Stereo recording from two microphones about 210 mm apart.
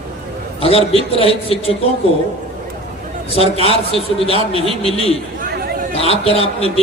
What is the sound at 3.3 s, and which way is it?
A man's voice, 30° left (ahead or behind).